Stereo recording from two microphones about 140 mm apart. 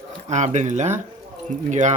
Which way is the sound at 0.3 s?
55° right (ahead or behind).